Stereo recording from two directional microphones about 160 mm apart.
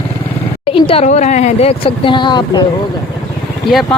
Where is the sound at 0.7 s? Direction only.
35° left (ahead or behind).